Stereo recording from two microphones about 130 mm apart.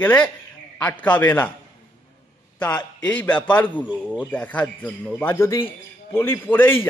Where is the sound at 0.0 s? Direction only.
10° left (ahead or behind).